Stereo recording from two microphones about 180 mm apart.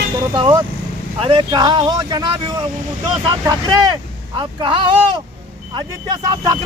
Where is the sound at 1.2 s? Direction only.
30° right (ahead or behind).